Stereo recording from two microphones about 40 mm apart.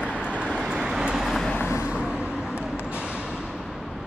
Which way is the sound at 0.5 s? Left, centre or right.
Centre.